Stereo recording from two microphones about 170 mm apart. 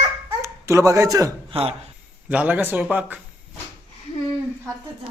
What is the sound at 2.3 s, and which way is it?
Speech, 10° right (ahead or behind).